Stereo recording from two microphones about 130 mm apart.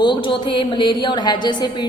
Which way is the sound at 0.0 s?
40° left (ahead or behind).